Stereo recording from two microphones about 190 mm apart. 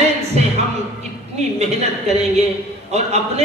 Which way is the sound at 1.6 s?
35° right (ahead or behind).